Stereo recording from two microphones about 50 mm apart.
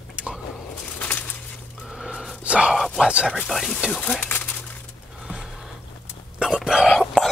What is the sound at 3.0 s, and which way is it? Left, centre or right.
Speech, centre.